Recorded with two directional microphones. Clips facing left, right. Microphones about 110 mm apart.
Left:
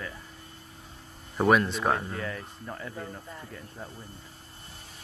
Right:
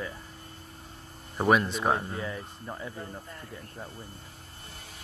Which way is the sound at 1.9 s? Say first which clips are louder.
Even; 15° right (ahead or behind).